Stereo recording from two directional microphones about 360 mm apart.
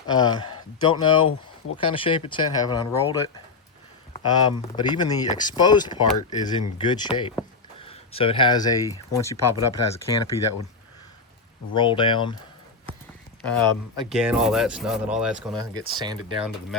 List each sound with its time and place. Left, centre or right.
0.1 s speech: centre
9.3 s speech: left
11.7 s speech: centre
13.9 s speech: centre